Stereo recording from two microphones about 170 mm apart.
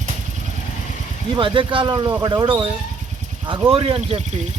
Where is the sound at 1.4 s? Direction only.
30° right (ahead or behind).